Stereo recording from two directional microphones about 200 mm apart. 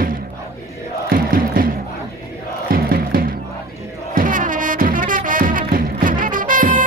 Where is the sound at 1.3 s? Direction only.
45° right (ahead or behind).